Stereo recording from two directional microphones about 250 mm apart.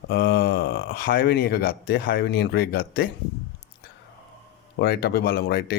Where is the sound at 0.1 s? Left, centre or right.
Left.